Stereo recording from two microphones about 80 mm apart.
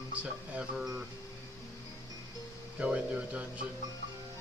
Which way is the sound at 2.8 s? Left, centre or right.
Centre.